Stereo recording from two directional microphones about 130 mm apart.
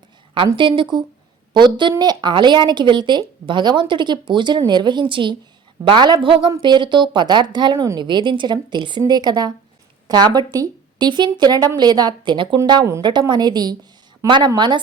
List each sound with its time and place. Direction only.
0.3 s speech: 40° right (ahead or behind)